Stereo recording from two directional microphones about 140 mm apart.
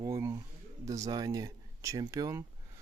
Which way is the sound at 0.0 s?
20° right (ahead or behind).